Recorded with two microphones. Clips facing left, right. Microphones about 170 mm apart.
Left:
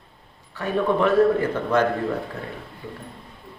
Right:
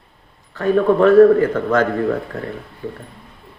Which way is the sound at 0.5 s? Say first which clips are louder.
Right 7 dB; 55° right (ahead or behind).